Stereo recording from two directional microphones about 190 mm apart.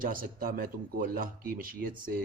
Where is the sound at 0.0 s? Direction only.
50° right (ahead or behind).